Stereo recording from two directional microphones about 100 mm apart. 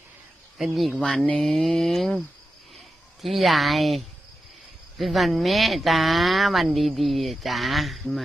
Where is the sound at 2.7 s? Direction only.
Centre (ahead or behind).